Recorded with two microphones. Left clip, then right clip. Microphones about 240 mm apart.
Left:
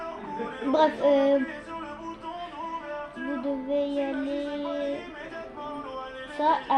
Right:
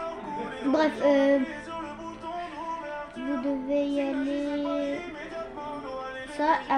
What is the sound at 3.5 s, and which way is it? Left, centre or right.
Music, right.